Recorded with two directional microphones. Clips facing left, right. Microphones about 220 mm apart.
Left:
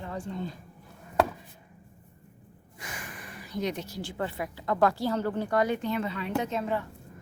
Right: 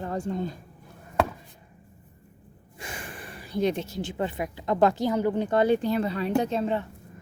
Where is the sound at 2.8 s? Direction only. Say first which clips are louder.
Right 3 dB; 30° right (ahead or behind).